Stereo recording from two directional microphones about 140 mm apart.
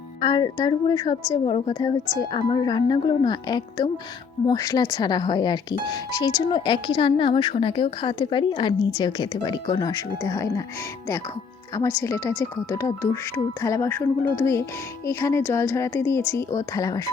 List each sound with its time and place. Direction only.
0.2 s speech: 30° left (ahead or behind)
11.7 s speech: 20° left (ahead or behind)